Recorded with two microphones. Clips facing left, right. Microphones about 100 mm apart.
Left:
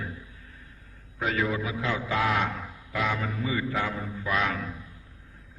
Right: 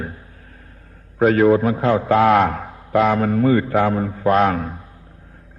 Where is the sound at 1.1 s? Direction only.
50° right (ahead or behind).